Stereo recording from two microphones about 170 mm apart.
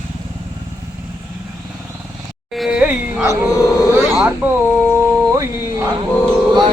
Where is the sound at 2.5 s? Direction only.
5° right (ahead or behind).